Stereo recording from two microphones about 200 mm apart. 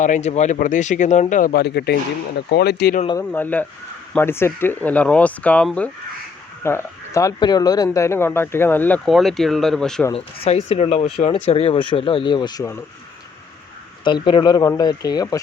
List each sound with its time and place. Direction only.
0.0 s speech: 35° left (ahead or behind); by 3.0 s 55° left (ahead or behind)
3.2 s speech: 10° left (ahead or behind)
10.1 s speech: 30° left (ahead or behind)
14.0 s speech: 25° left (ahead or behind)